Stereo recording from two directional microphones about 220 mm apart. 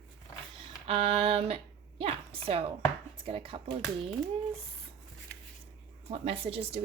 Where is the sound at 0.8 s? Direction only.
25° right (ahead or behind).